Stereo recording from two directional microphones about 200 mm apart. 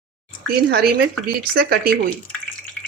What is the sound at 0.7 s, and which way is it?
Speech, 50° right (ahead or behind).